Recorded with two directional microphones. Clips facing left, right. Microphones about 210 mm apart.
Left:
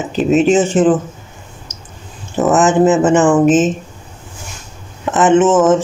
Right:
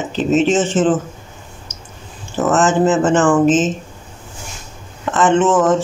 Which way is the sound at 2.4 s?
15° left (ahead or behind).